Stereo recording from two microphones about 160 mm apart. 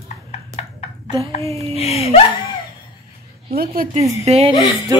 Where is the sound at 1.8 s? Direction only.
40° left (ahead or behind).